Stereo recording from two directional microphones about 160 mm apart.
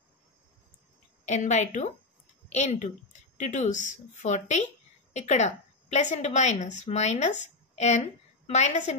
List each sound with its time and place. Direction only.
1.2 s a woman's voice: 45° left (ahead or behind)